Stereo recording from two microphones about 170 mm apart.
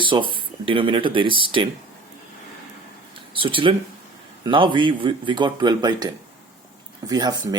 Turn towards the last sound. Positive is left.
turn(degrees=-25)  # may be behind; listen again after turning